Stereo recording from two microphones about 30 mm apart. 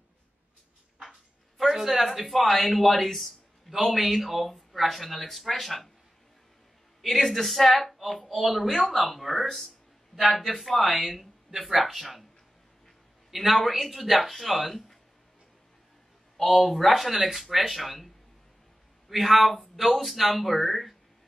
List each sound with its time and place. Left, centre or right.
1.7 s speech: centre
7.1 s speech: centre
13.3 s speech: centre
16.3 s speech: centre